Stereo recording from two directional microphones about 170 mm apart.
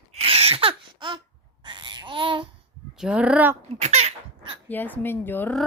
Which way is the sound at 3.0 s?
5° right (ahead or behind).